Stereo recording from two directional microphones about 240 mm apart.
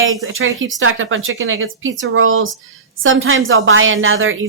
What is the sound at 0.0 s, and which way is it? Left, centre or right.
Speech, right.